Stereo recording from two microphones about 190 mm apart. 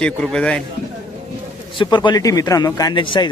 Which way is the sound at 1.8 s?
25° left (ahead or behind).